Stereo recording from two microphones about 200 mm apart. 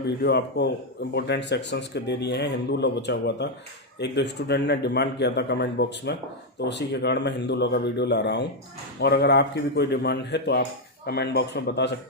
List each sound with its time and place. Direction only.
0.2 s speech: 55° left (ahead or behind)